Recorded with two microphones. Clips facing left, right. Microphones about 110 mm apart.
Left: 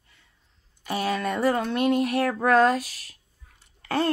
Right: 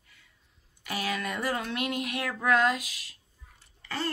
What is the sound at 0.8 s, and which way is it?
Speech, 30° left (ahead or behind).